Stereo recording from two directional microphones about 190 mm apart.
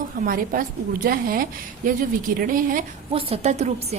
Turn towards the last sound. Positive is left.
turn(degrees=-35)  # may be behind; listen again after turning